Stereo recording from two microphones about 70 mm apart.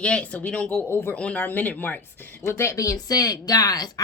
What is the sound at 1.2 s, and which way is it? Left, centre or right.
Speech, centre.